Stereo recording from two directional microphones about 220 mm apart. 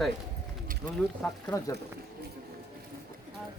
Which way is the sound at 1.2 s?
10° left (ahead or behind).